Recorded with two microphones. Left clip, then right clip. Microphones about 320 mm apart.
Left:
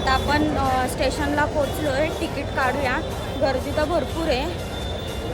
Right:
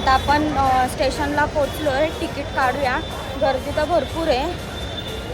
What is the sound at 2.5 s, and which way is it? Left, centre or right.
Speech, centre.